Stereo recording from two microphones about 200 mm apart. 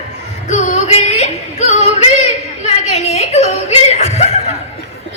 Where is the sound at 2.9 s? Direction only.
35° left (ahead or behind).